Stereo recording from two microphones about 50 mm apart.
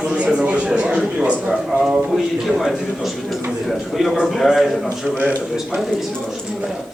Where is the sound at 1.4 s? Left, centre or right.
Centre.